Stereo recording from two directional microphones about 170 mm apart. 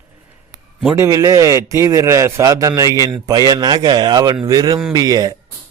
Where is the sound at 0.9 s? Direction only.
20° right (ahead or behind).